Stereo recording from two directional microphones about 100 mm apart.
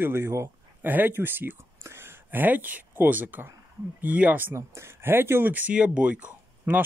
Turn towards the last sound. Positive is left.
turn(degrees=-15)  # may be behind; listen again after turning